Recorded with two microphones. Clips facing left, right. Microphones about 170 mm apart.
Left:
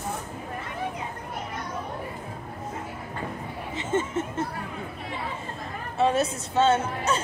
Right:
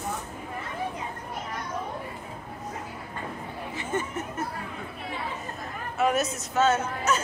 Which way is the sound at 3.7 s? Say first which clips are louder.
Left 5 dB; 25° left (ahead or behind).